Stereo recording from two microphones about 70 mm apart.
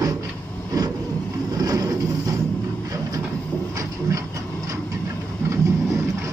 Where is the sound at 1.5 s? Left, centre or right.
Right.